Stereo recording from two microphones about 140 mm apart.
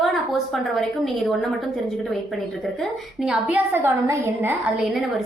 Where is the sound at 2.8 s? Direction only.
5° right (ahead or behind).